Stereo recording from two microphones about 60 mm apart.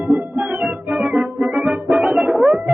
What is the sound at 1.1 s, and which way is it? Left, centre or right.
Music, centre.